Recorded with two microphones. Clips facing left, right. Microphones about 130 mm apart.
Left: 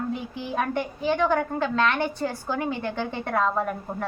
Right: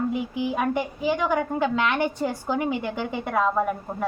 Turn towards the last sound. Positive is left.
turn(degrees=-5)  # may be behind; listen again after turning